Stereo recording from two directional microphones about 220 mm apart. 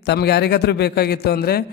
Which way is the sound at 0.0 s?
50° left (ahead or behind).